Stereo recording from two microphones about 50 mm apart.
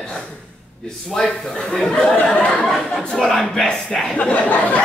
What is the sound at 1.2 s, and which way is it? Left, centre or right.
A man's voice, centre.